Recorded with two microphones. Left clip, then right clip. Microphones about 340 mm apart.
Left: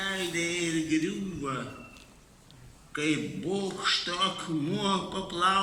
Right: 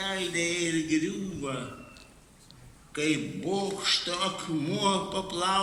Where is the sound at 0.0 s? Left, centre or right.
Centre.